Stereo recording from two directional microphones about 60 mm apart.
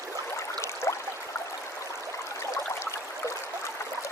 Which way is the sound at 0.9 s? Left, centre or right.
Left.